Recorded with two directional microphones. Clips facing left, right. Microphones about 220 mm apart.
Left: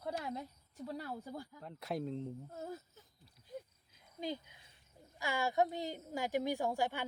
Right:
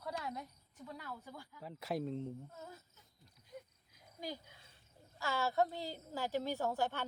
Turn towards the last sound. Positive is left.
turn(degrees=10)  # may be behind; listen again after turning